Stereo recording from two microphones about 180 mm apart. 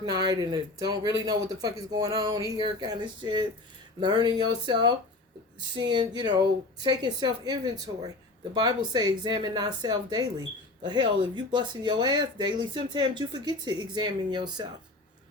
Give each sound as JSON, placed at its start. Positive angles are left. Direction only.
{"t": 0.0, "sound": "speech", "side_deg": -20}